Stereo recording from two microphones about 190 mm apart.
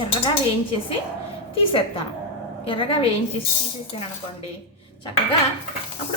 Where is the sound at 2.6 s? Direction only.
25° left (ahead or behind).